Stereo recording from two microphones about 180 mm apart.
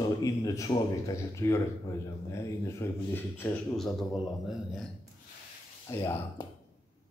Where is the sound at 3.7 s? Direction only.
Centre (ahead or behind).